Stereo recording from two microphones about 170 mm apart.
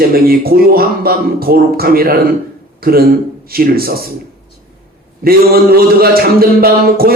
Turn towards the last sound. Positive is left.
turn(degrees=-60)  # may be behind; listen again after turning